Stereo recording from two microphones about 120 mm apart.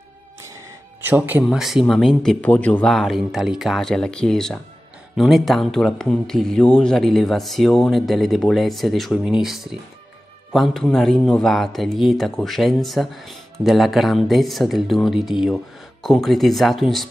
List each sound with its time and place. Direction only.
1.0 s speech: 15° right (ahead or behind)
1.5 s speech: 5° right (ahead or behind)
2.4 s speech: 10° left (ahead or behind)
2.9 s speech: centre (ahead or behind)